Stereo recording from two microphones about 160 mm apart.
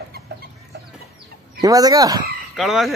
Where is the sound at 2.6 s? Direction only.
Centre (ahead or behind).